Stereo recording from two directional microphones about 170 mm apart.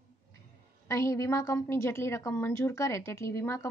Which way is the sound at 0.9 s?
15° left (ahead or behind).